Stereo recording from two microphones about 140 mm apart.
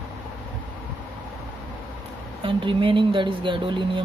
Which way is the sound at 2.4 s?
35° right (ahead or behind).